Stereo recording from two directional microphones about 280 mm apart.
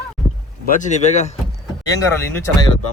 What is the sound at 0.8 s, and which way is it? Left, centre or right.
Speech, left.